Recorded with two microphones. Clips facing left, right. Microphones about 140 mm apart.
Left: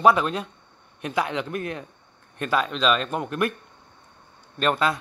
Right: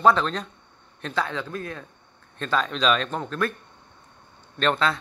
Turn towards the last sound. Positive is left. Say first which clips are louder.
# even
turn(degrees=10)  # may be behind; listen again after turning